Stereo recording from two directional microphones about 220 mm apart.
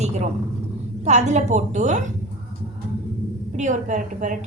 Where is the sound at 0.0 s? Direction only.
30° right (ahead or behind).